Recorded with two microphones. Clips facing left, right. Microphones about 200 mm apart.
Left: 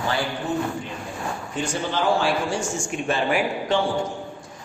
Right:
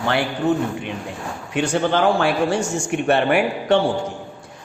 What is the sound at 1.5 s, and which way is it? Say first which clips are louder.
A man's voice: right 8 dB; 65° right (ahead or behind).